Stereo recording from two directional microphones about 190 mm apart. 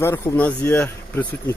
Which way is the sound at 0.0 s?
15° left (ahead or behind).